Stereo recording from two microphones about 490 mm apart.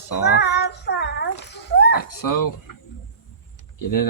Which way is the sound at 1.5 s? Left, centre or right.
Centre.